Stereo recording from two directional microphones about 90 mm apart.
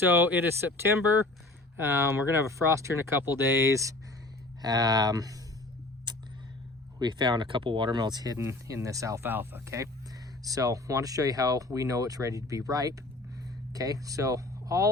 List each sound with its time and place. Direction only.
0.0 s speech: 25° right (ahead or behind)
1.8 s speech: 30° right (ahead or behind)
3.7 s speech: 35° right (ahead or behind)
7.0 s speech: 55° right (ahead or behind)
7.9 s speech: 50° right (ahead or behind)
8.4 s speech: 35° right (ahead or behind)
9.3 s speech: 25° right (ahead or behind)
10.4 s speech: 40° right (ahead or behind)